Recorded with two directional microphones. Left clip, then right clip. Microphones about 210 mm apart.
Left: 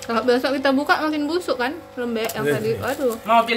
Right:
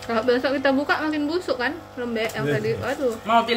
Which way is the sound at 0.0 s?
15° left (ahead or behind).